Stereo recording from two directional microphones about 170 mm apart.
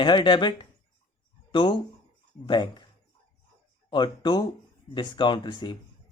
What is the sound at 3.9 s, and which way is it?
Speech, 25° left (ahead or behind).